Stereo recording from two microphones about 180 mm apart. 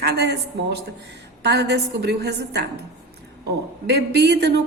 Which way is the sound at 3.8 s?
65° right (ahead or behind).